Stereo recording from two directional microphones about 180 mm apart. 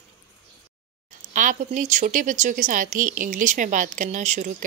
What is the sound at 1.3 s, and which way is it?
Speech, 45° right (ahead or behind).